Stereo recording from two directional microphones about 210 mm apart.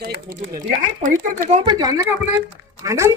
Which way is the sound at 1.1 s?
40° right (ahead or behind).